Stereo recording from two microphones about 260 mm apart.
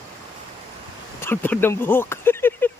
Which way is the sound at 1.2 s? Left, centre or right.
Centre.